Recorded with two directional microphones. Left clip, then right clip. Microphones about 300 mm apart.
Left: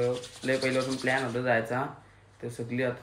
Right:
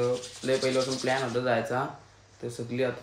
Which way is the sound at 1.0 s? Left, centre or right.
Centre.